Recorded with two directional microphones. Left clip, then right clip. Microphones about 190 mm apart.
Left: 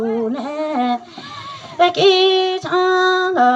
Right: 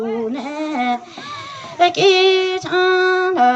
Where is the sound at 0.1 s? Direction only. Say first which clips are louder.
Left 2 dB; 20° left (ahead or behind).